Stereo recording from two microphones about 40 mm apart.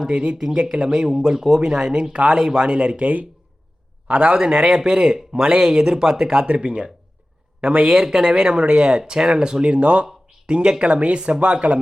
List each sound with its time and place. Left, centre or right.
0.7 s speech: centre
2.1 s speech: right
2.4 s speech: centre
2.6 s a man's voice: right
4.4 s speech: centre
6.3 s speech: right
7.8 s speech: centre; by 11.8 s right